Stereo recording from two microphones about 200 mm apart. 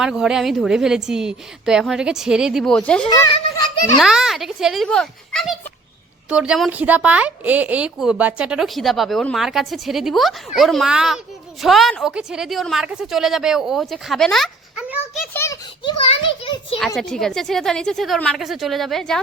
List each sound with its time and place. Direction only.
0.0 s speech: 5° right (ahead or behind)
3.1 s a child's voice: 25° left (ahead or behind)
3.9 s speech: centre (ahead or behind)
15.3 s a sound: 10° left (ahead or behind)
15.8 s a child's voice: 25° left (ahead or behind)
16.8 s speech: centre (ahead or behind)